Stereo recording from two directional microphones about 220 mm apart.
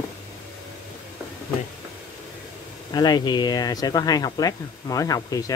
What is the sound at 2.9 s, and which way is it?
Speech, 20° left (ahead or behind).